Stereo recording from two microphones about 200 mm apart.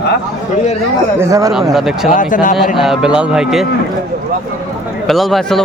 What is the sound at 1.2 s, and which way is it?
Speech, 15° right (ahead or behind).